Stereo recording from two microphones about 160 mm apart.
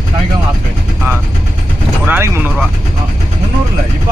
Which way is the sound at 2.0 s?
15° right (ahead or behind).